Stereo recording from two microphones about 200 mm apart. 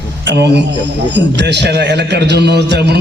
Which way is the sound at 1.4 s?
60° right (ahead or behind).